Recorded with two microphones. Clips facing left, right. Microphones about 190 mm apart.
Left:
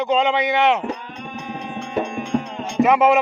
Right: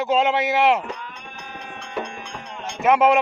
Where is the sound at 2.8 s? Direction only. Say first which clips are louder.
Even; centre (ahead or behind).